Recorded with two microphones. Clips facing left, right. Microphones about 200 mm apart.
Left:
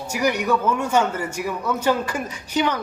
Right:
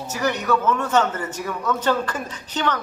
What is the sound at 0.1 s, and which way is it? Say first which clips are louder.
Speech: left 1 dB; 10° left (ahead or behind).